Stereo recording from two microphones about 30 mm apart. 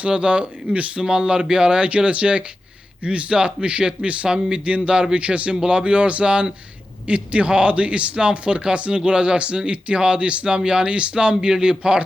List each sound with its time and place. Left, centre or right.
0.1 s speech: right
1.0 s speech: right
4.3 s speech: right
5.1 s speech: right
10.4 s speech: right